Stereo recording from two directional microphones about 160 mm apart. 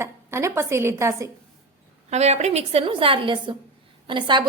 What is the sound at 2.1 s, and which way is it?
A woman's voice, 45° right (ahead or behind).